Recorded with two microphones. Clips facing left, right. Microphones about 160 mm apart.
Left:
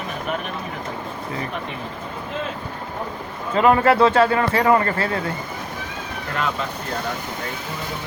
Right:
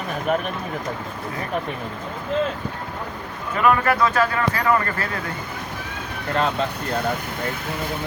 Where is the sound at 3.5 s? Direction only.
25° left (ahead or behind).